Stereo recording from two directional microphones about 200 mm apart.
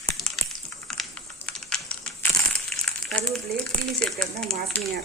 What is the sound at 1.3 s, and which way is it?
Computer keyboard, 5° left (ahead or behind).